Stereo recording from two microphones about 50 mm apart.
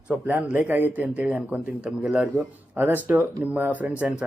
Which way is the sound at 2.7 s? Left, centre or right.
Right.